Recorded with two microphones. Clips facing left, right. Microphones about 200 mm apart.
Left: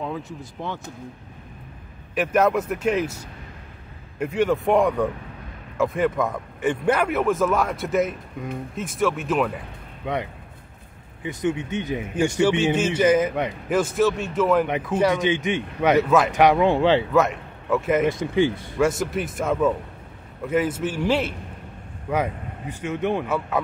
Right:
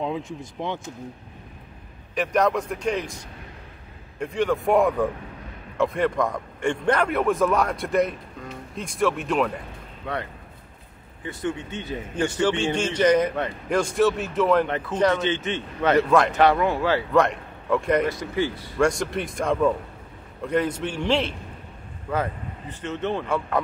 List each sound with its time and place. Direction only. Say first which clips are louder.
2.1 s a man's voice: left 2 dB; 5° left (ahead or behind)
10.0 s speech: left 3 dB; 20° left (ahead or behind)
11.2 s a man's voice: left 4 dB; 15° left (ahead or behind)
14.7 s a man's voice: left 1 dB; 15° left (ahead or behind)
17.1 s a man's voice: even; 5° left (ahead or behind)
18.2 s speech: left 5 dB; 20° left (ahead or behind)
18.8 s a man's voice: even; 5° left (ahead or behind)